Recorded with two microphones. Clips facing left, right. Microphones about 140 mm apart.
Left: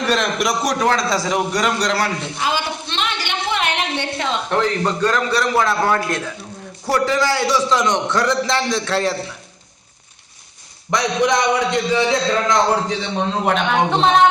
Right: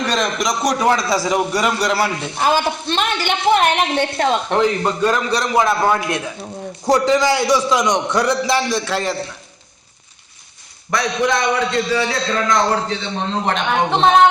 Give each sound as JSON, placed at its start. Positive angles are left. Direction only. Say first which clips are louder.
{"t": 0.0, "sound": "a man's voice", "louder": "left 1 dB", "side_deg": 5}
{"t": 2.4, "sound": "a woman's voice", "louder": "right 7 dB", "side_deg": -45}
{"t": 4.4, "sound": "a man's voice", "louder": "right 2 dB", "side_deg": -20}
{"t": 10.9, "sound": "a man's voice", "louder": "left 1 dB", "side_deg": 20}